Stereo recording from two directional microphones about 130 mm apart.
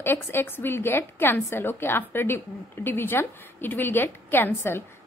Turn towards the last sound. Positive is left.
turn(degrees=15)  # may be behind; listen again after turning